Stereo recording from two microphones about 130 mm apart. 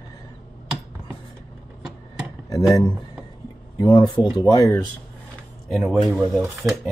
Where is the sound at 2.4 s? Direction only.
25° left (ahead or behind).